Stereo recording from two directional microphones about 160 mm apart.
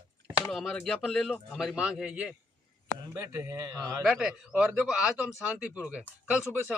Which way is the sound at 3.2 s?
20° right (ahead or behind).